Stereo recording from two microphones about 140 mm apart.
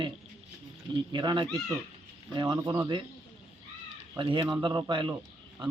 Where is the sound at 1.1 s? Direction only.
35° right (ahead or behind).